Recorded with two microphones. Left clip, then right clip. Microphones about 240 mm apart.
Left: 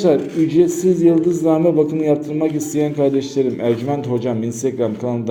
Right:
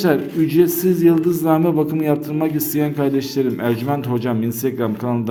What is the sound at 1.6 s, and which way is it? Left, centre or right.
Speech, right.